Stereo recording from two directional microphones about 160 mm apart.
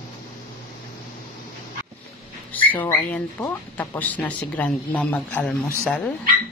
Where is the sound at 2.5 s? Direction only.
10° left (ahead or behind).